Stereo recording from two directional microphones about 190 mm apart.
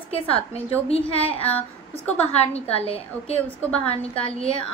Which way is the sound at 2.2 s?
35° left (ahead or behind).